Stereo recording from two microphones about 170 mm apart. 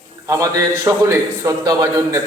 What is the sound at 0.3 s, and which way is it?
A man's voice, 20° right (ahead or behind).